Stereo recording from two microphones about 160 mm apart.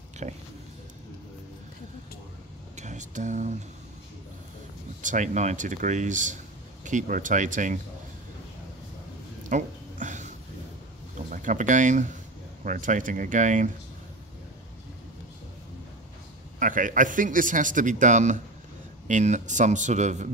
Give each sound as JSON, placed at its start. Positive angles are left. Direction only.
{"t": 0.2, "sound": "speech", "side_deg": -45}
{"t": 2.7, "sound": "speech", "side_deg": -45}
{"t": 5.0, "sound": "speech", "side_deg": -50}
{"t": 9.5, "sound": "a sound", "side_deg": -50}
{"t": 11.2, "sound": "speech", "side_deg": -55}
{"t": 16.5, "sound": "a man's voice", "side_deg": -55}